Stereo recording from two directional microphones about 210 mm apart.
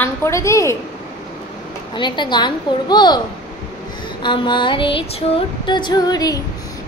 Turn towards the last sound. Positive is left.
turn(degrees=20)  # may be behind; listen again after turning